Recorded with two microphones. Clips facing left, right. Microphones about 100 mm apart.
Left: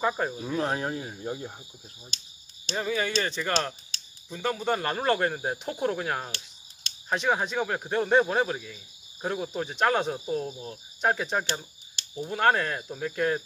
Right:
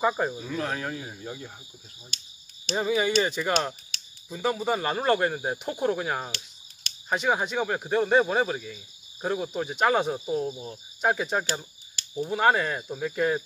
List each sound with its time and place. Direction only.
0.0 s speech: 5° right (ahead or behind)
0.4 s speech: 20° left (ahead or behind)
2.7 s speech: 15° right (ahead or behind)